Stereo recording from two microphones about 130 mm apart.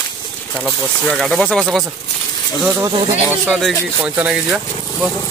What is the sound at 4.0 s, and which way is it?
Speech, 10° right (ahead or behind).